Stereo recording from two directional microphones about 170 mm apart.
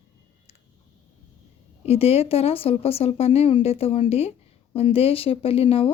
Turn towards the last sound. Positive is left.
turn(degrees=35)  # may be behind; listen again after turning